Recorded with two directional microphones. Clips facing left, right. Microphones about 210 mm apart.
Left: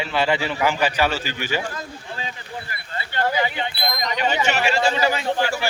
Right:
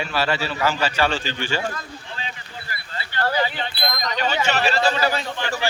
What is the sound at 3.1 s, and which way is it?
Speech, 15° left (ahead or behind).